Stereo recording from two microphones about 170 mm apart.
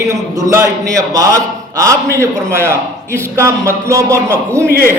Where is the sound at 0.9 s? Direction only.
20° right (ahead or behind).